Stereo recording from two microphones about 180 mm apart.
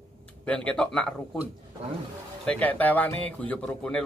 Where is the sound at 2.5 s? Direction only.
10° left (ahead or behind).